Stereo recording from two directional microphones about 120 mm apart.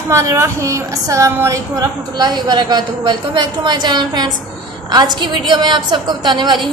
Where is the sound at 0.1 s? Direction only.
25° right (ahead or behind).